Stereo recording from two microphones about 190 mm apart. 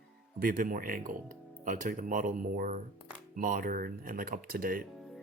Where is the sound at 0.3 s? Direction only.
45° right (ahead or behind).